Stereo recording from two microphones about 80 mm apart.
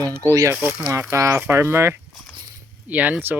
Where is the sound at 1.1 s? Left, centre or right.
Right.